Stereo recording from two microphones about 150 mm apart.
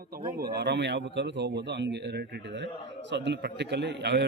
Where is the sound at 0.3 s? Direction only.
90° right.